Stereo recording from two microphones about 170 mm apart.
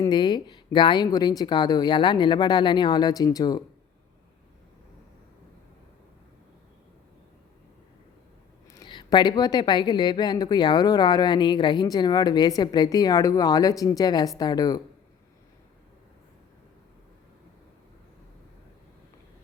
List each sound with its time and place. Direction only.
0.0 s a woman's voice: 25° left (ahead or behind)
8.7 s a woman's voice: 25° left (ahead or behind)